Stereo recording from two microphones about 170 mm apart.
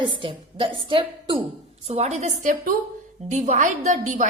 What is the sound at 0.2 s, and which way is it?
A woman's voice, 30° right (ahead or behind).